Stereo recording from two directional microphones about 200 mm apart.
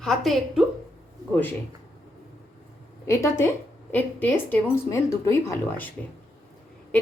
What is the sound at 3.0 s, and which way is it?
Speech, 15° left (ahead or behind).